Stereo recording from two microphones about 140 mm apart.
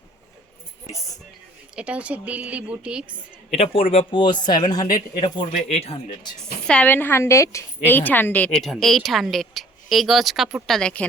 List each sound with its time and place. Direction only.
1.7 s speech: 10° right (ahead or behind)
3.5 s speech: 45° left (ahead or behind)
5.7 s speech: 50° left (ahead or behind)
6.4 s a woman's voice: 5° left (ahead or behind)